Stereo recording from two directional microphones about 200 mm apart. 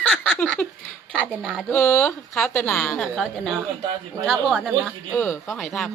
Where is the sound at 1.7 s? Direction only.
15° left (ahead or behind).